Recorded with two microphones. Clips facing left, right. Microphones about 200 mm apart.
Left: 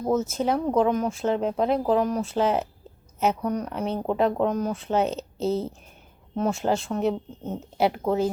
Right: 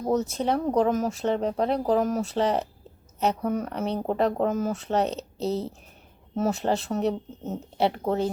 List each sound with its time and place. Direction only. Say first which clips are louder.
0.0 s speech: left 1 dB; centre (ahead or behind)